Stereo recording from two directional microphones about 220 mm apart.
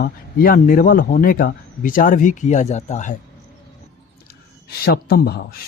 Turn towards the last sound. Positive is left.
turn(degrees=45)  # may be behind; listen again after turning